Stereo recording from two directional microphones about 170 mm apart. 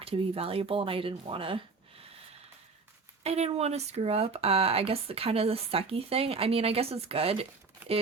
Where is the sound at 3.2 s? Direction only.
35° right (ahead or behind).